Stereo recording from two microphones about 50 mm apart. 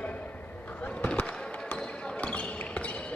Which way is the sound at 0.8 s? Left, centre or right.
Left.